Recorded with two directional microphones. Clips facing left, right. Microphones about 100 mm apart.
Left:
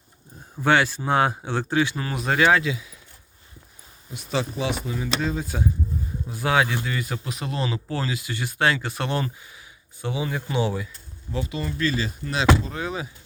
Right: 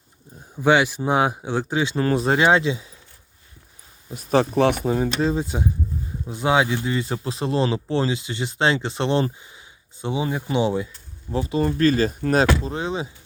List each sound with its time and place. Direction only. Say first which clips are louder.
0.6 s speech: right 3 dB; 15° right (ahead or behind)
2.0 s speech: right 4 dB; 35° right (ahead or behind)
4.1 s speech: right 8 dB; 40° right (ahead or behind)
4.4 s speech: right 8 dB; 60° right (ahead or behind)
5.2 s speech: right 4 dB; 25° right (ahead or behind)
11.3 s speech: right 6 dB; 35° right (ahead or behind)
11.6 s speech: right 9 dB; 50° right (ahead or behind)
12.6 s speech: right 4 dB; 30° right (ahead or behind)